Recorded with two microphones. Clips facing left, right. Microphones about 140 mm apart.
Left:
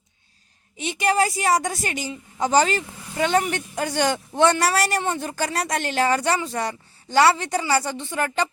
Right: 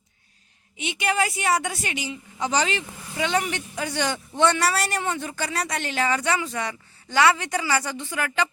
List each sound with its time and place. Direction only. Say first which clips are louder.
0.8 s speech: left 4 dB; 35° left (ahead or behind)